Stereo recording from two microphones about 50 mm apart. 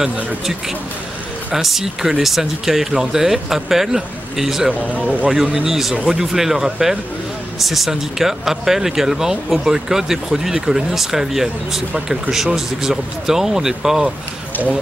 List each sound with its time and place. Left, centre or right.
1.5 s speech: centre
4.9 s speech: right
5.5 s speech: centre